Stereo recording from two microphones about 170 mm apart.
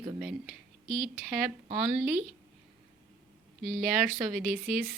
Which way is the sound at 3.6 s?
Centre (ahead or behind).